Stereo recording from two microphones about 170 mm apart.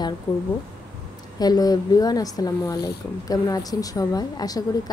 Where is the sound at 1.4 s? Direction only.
25° left (ahead or behind).